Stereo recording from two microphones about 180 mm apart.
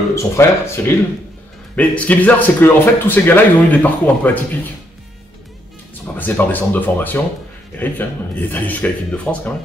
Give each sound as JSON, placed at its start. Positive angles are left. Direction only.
{"t": 0.1, "sound": "speech", "side_deg": 15}
{"t": 6.1, "sound": "speech", "side_deg": 10}